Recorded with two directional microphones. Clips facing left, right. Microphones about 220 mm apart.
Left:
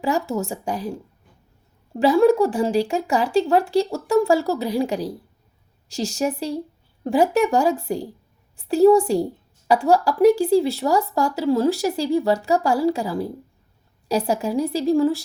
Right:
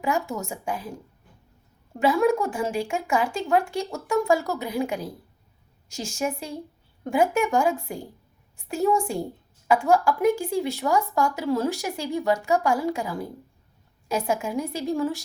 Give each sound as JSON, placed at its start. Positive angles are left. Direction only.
{"t": 0.0, "sound": "speech", "side_deg": 35}
{"t": 2.0, "sound": "speech", "side_deg": 35}